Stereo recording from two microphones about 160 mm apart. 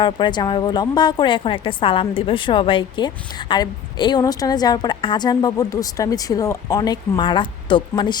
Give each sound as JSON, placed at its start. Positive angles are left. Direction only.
{"t": 0.0, "sound": "a woman's voice", "side_deg": 30}